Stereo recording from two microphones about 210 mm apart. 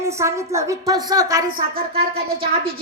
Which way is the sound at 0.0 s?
15° right (ahead or behind).